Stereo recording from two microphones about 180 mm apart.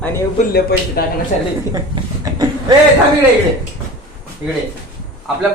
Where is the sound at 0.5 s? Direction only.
60° left (ahead or behind).